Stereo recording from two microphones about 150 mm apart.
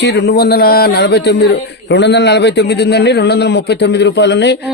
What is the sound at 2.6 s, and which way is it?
Speech, 90° left.